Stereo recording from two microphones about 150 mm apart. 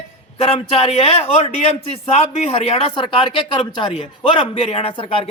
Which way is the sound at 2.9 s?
35° left (ahead or behind).